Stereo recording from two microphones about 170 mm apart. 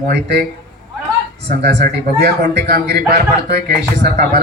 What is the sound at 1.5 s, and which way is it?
A man's voice, 65° right (ahead or behind).